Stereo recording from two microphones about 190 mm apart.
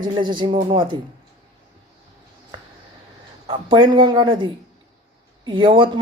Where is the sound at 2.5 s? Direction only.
25° right (ahead or behind).